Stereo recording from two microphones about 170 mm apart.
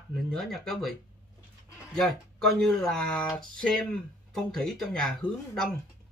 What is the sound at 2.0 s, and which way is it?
Speech, centre (ahead or behind).